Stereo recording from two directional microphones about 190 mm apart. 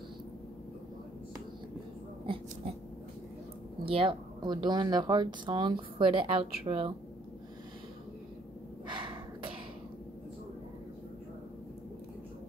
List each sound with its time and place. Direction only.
3.8 s speech: 30° right (ahead or behind)
8.8 s gasp: 25° right (ahead or behind)